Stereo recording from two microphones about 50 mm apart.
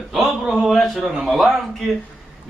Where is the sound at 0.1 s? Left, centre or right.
Centre.